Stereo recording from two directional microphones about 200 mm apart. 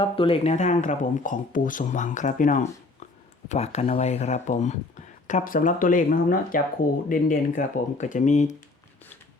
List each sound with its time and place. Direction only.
0.0 s speech: 25° left (ahead or behind)